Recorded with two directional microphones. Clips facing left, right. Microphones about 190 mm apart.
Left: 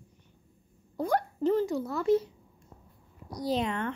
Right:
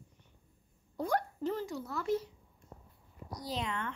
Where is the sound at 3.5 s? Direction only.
55° left (ahead or behind).